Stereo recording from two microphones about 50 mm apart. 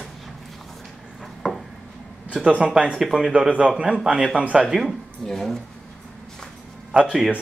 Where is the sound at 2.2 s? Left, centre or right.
Centre.